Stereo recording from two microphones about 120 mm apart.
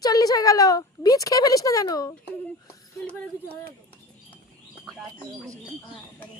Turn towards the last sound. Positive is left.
turn(degrees=0)  # may be behind; listen again after turning